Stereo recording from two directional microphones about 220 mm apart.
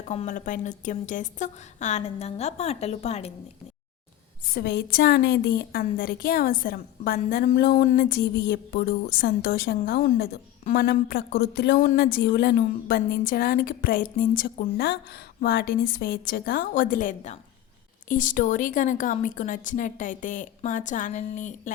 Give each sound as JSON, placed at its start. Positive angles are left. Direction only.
{"t": 0.1, "sound": "speech", "side_deg": 35}
{"t": 4.4, "sound": "a woman's voice", "side_deg": 45}